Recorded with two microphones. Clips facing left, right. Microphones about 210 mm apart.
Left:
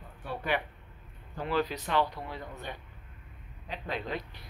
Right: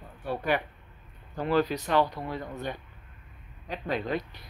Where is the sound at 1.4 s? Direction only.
45° right (ahead or behind).